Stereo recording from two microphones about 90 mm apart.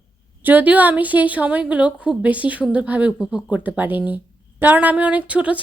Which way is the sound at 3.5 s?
15° right (ahead or behind).